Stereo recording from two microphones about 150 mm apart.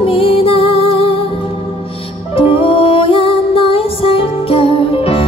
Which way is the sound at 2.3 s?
40° left (ahead or behind).